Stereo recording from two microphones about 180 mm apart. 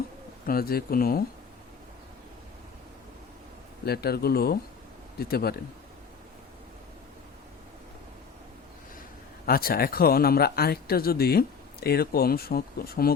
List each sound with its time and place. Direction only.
0.4 s speech: 55° left (ahead or behind)
3.8 s speech: 60° left (ahead or behind)
9.5 s speech: 55° left (ahead or behind)